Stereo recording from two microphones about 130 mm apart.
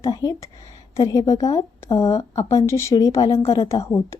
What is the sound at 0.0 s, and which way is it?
A woman's voice, 25° left (ahead or behind).